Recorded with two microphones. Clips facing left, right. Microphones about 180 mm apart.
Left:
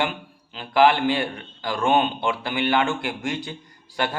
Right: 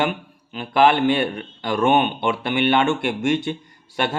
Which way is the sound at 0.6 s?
20° right (ahead or behind).